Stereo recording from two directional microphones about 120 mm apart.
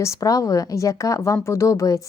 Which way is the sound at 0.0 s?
25° left (ahead or behind).